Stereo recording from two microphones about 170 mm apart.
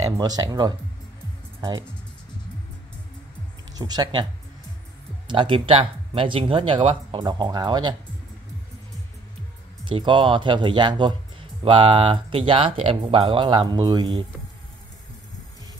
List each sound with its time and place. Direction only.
0.0 s speech: 25° right (ahead or behind)
3.7 s speech: 25° right (ahead or behind)
9.8 s speech: 30° right (ahead or behind)